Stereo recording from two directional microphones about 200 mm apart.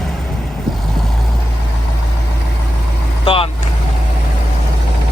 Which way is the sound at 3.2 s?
25° left (ahead or behind).